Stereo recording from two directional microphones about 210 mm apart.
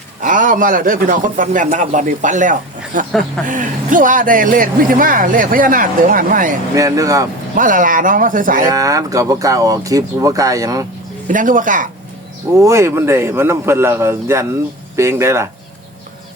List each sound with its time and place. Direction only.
0.2 s speech: 40° right (ahead or behind)
6.7 s speech: 15° right (ahead or behind)
7.5 s speech: 40° right (ahead or behind)
8.6 s speech: 15° right (ahead or behind)
11.3 s speech: 40° right (ahead or behind)
12.5 s speech: 15° right (ahead or behind)